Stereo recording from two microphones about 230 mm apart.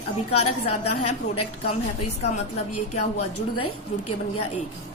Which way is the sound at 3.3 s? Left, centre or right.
Left.